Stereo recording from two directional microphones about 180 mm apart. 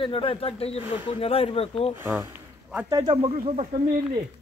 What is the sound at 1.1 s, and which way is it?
Speech, 30° left (ahead or behind).